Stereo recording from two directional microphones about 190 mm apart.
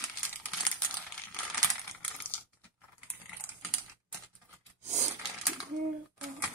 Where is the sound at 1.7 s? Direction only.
10° left (ahead or behind).